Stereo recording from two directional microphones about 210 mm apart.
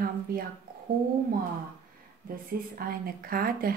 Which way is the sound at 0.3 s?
45° right (ahead or behind).